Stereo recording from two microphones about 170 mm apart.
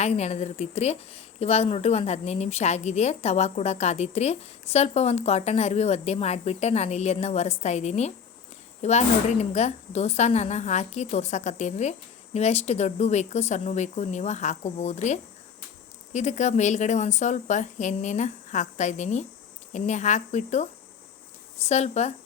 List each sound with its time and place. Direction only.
0.0 s a woman's voice: 40° left (ahead or behind)
21.7 s a woman's voice: 40° left (ahead or behind)